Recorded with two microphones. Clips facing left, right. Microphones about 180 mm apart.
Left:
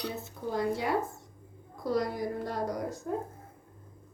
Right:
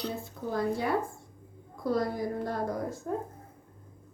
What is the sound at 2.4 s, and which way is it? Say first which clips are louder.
Speech: right 1 dB; 20° left (ahead or behind).